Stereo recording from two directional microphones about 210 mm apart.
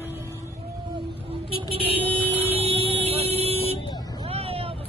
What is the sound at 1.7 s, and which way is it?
Vehicle, 30° right (ahead or behind).